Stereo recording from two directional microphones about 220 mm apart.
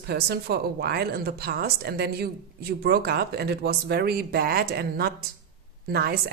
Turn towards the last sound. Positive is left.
turn(degrees=-45)  # may be behind; listen again after turning